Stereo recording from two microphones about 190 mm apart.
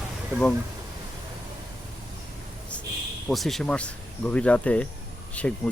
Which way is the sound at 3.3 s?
Centre (ahead or behind).